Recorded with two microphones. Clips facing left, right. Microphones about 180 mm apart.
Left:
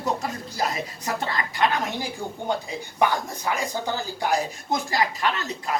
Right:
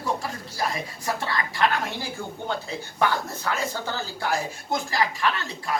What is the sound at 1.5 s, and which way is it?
Speech, 15° left (ahead or behind).